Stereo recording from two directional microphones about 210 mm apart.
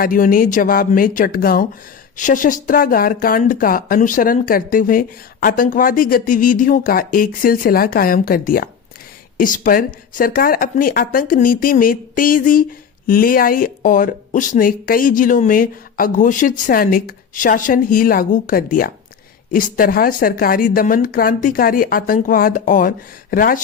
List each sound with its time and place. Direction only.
0.0 s speech: 40° left (ahead or behind)